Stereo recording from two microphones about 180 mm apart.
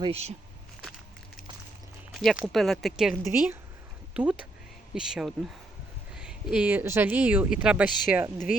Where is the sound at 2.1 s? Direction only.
Centre (ahead or behind).